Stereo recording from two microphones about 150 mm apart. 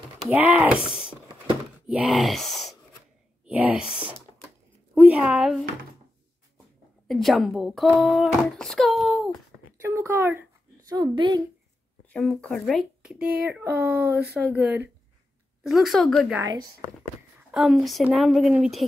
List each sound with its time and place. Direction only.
0.3 s speech: 10° right (ahead or behind)
1.9 s speech: 5° right (ahead or behind)
3.4 s a woman's voice: 10° right (ahead or behind)
7.1 s a child's voice: centre (ahead or behind)
9.8 s speech: 20° right (ahead or behind)
10.9 s a woman's voice: 30° right (ahead or behind)
12.1 s a child's voice: 5° left (ahead or behind)
17.5 s a woman's voice: 5° right (ahead or behind)